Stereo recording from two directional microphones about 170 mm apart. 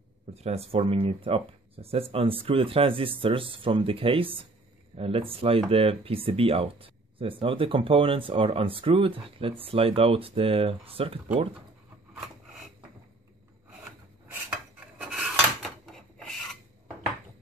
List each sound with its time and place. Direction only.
0.3 s speech: 40° right (ahead or behind)
15.0 s rub: 5° right (ahead or behind)